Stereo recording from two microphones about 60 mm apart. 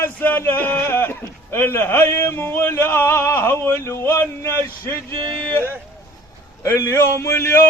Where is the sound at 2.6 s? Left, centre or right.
Left.